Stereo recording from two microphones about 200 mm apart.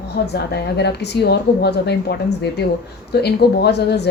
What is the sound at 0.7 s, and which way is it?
Speech, 55° left (ahead or behind).